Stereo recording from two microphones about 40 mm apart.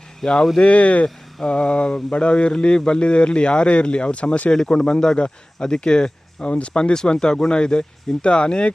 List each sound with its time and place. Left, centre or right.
0.2 s speech: centre
0.6 s speech: left
1.0 s speech: centre